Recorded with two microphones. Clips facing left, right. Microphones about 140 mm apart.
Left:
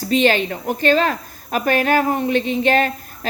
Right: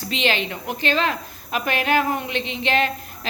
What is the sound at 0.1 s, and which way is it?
A woman's voice, 45° left (ahead or behind).